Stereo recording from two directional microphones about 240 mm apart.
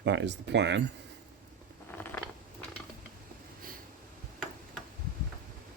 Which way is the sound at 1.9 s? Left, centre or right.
Centre.